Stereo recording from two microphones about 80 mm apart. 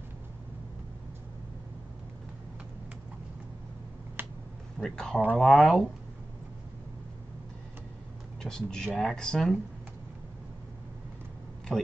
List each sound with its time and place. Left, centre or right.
4.2 s finger snapping: right
4.7 s speech: centre
8.4 s speech: centre
11.7 s speech: centre